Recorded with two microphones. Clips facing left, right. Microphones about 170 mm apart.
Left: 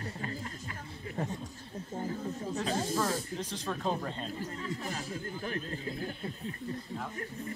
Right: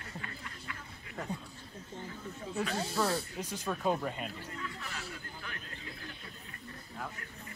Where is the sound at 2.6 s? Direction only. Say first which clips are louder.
Left 2 dB; 45° left (ahead or behind).